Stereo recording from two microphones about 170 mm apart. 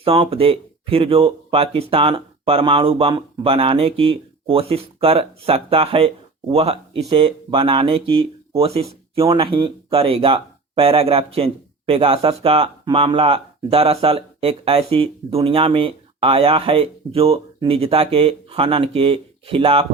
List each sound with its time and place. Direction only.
0.0 s speech: 35° right (ahead or behind)